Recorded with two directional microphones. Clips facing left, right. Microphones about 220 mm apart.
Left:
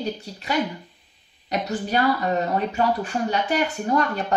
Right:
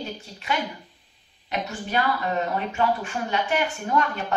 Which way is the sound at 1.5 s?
40° left (ahead or behind).